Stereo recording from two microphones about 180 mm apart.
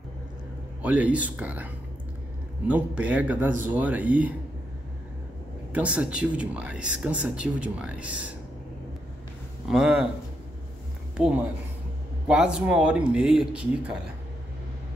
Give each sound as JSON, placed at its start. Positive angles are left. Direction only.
{"t": 0.8, "sound": "speech", "side_deg": -10}
{"t": 2.7, "sound": "speech", "side_deg": -5}
{"t": 5.7, "sound": "speech", "side_deg": -5}
{"t": 9.7, "sound": "speech", "side_deg": -5}
{"t": 11.1, "sound": "speech", "side_deg": -5}